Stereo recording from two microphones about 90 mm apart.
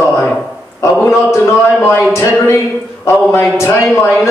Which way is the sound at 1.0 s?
30° left (ahead or behind).